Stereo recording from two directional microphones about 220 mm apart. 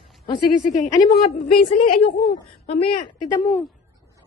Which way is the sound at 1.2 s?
30° left (ahead or behind).